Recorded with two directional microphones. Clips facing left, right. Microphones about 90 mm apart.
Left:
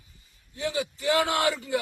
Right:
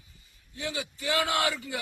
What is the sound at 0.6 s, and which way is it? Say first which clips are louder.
Speech: left 6 dB; 30° left (ahead or behind).